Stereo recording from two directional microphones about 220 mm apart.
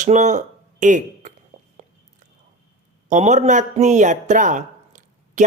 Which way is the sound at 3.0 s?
35° right (ahead or behind).